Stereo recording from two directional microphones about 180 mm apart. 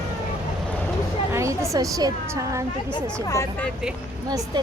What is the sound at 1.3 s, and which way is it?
Speech, 15° right (ahead or behind).